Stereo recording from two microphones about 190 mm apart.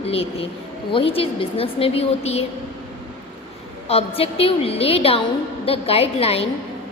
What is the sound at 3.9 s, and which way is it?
A woman's voice, 30° left (ahead or behind).